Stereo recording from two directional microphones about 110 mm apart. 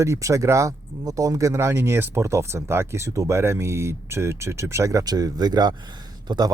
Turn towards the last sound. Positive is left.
turn(degrees=-40)  # may be behind; listen again after turning